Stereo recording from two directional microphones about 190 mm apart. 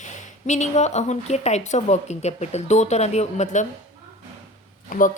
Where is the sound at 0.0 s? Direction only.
40° left (ahead or behind).